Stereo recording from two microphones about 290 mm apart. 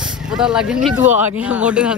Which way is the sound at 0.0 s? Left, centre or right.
Centre.